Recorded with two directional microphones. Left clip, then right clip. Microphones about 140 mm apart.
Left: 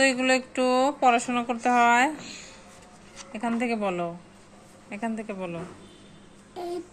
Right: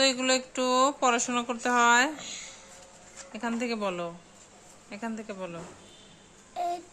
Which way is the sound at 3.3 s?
25° right (ahead or behind).